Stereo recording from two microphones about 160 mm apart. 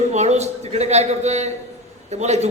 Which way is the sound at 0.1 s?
45° right (ahead or behind).